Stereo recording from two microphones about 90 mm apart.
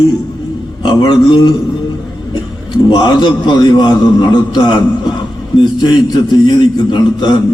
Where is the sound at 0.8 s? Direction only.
55° left (ahead or behind).